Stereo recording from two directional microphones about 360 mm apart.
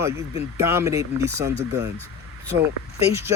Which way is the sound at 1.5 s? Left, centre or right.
Right.